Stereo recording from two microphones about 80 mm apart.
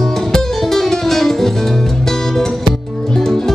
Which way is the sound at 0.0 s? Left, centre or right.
Centre.